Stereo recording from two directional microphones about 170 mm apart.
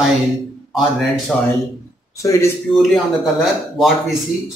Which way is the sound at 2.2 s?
15° left (ahead or behind).